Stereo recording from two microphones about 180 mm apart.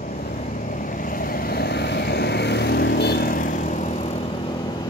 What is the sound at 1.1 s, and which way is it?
Vehicle, 55° left (ahead or behind).